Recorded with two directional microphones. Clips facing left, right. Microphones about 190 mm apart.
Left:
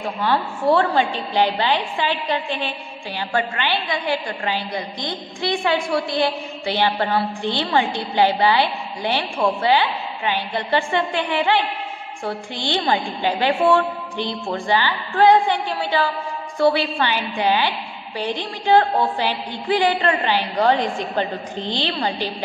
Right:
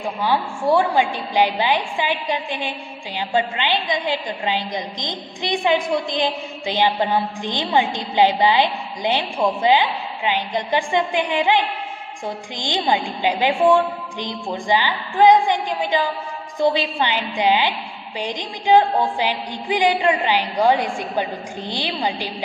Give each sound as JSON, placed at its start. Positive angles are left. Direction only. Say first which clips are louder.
{"t": 0.0, "sound": "a woman's voice", "louder": "even", "side_deg": -10}